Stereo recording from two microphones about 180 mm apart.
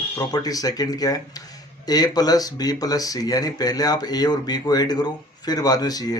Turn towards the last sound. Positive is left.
turn(degrees=20)  # may be behind; listen again after turning